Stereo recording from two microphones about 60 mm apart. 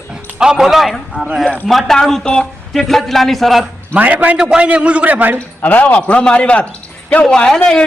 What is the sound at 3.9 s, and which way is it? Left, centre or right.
Speech, right.